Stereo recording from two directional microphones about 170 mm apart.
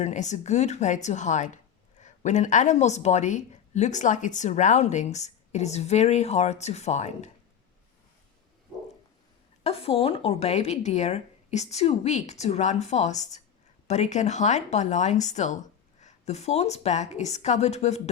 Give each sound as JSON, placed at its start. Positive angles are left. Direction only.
{"t": 0.0, "sound": "a woman's voice", "side_deg": 45}
{"t": 9.6, "sound": "speech", "side_deg": 35}